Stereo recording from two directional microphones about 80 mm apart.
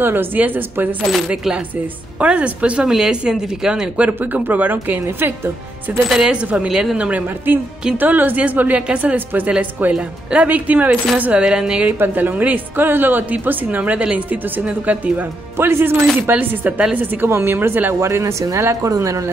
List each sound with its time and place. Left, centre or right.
0.0 s a woman's voice: right
1.3 s a woman's voice: centre; by 5.9 s right
6.0 s speech: centre
6.3 s speech: centre
7.1 s a woman's voice: right
12.0 s a woman's voice: right
15.5 s a woman's voice: right
18.0 s speech: right
18.6 s speech: right